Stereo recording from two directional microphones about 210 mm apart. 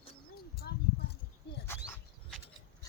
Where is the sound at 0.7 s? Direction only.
50° left (ahead or behind).